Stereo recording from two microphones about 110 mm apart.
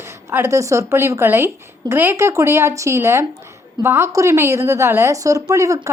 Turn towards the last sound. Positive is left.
turn(degrees=-30)  # may be behind; listen again after turning